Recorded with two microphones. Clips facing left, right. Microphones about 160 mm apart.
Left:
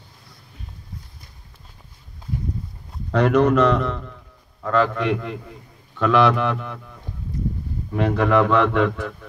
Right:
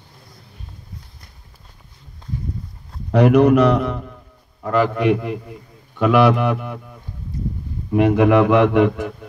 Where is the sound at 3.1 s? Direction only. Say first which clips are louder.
Right 4 dB; 10° right (ahead or behind).